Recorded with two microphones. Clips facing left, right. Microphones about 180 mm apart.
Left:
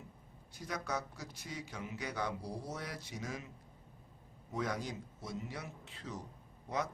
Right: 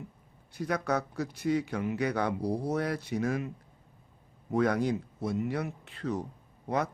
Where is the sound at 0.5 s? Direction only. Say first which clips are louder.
Right 10 dB; 65° right (ahead or behind).